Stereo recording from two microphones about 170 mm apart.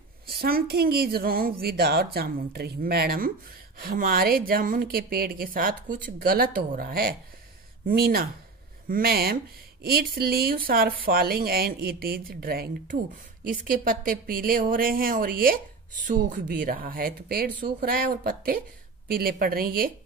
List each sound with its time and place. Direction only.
0.3 s a woman's voice: 65° right (ahead or behind)